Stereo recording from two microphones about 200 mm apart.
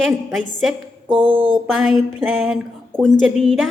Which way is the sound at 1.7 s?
Centre (ahead or behind).